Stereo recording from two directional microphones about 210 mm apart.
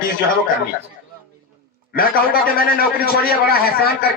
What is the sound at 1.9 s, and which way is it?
A man's voice, 45° left (ahead or behind).